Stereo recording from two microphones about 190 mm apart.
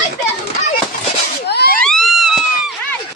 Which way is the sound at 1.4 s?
60° left (ahead or behind).